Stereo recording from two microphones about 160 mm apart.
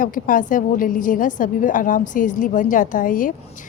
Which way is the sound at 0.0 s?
55° left (ahead or behind).